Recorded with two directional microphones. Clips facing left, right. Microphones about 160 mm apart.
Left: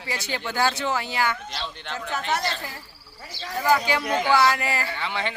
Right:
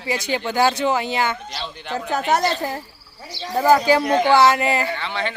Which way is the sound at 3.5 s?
40° right (ahead or behind).